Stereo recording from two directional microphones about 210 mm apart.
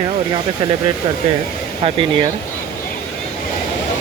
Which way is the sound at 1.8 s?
25° right (ahead or behind).